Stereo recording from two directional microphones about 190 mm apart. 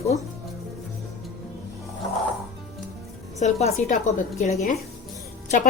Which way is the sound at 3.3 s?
40° left (ahead or behind).